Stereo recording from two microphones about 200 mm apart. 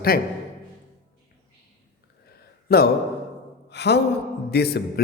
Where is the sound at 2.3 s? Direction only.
50° left (ahead or behind).